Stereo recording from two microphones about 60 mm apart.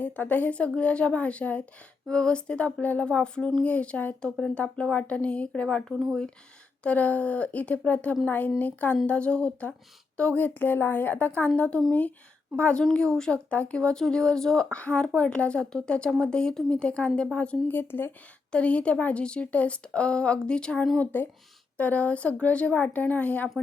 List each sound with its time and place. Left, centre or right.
0.0 s a woman's voice: left
3.1 s a woman's voice: centre
4.2 s speech: centre
4.5 s a woman's voice: centre
6.8 s a woman's voice: left
12.9 s a woman's voice: centre
13.5 s a woman's voice: left
14.7 s a woman's voice: left
17.7 s speech: left
18.5 s a woman's voice: left
21.0 s a woman's voice: left